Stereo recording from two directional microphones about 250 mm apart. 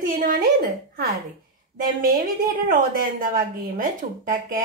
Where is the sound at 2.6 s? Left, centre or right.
Right.